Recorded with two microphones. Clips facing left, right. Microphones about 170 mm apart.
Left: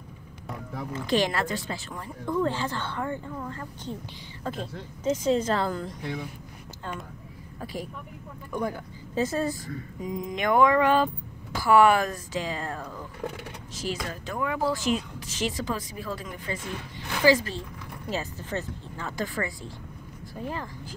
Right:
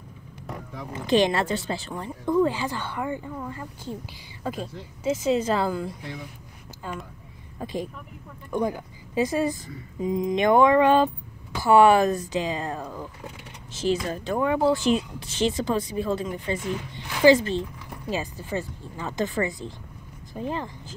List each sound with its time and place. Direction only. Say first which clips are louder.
0.9 s speech: right 4 dB; 20° right (ahead or behind)
2.2 s speech: right 4 dB; 15° right (ahead or behind)
7.6 s speech: right 4 dB; 20° right (ahead or behind)
18.1 s speech: right 3 dB; 15° right (ahead or behind)